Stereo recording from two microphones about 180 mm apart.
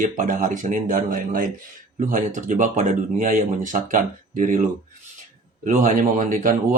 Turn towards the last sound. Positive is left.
turn(degrees=-50)  # may be behind; listen again after turning